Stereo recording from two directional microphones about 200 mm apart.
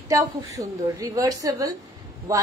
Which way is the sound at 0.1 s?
15° right (ahead or behind).